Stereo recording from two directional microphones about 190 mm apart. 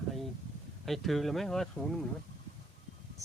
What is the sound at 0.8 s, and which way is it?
Speech, centre (ahead or behind).